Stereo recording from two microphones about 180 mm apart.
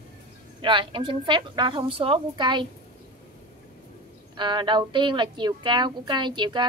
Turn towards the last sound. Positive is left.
turn(degrees=-25)  # may be behind; listen again after turning